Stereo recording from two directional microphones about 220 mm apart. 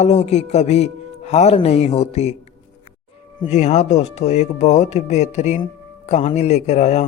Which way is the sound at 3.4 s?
30° left (ahead or behind).